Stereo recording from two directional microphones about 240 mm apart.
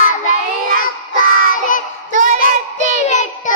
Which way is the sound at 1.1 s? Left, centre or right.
Left.